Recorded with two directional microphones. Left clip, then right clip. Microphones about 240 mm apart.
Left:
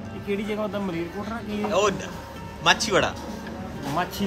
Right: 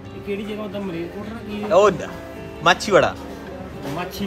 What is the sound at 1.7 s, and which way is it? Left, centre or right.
Speech, centre.